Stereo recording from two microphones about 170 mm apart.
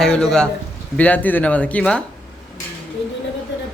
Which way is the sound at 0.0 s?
5° left (ahead or behind).